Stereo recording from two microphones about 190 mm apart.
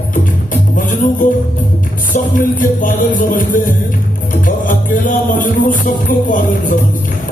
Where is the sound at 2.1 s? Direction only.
45° left (ahead or behind).